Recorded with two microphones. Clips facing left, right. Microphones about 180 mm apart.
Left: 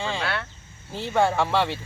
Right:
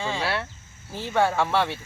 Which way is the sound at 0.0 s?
10° right (ahead or behind).